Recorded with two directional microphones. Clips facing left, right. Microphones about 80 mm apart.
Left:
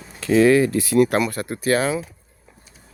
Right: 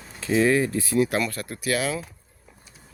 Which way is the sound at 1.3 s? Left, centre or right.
Left.